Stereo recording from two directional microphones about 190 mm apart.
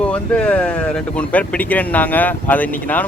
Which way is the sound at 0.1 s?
5° left (ahead or behind).